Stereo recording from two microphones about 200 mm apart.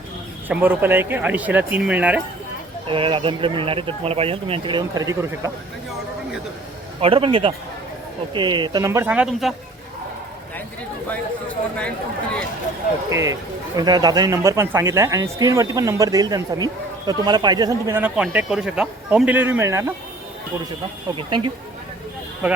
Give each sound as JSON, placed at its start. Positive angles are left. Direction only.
{"t": 0.4, "sound": "speech", "side_deg": -10}
{"t": 2.8, "sound": "speech", "side_deg": -25}
{"t": 7.0, "sound": "speech", "side_deg": -25}
{"t": 13.1, "sound": "speech", "side_deg": -15}
{"t": 21.2, "sound": "speech", "side_deg": -25}
{"t": 22.4, "sound": "speech", "side_deg": -5}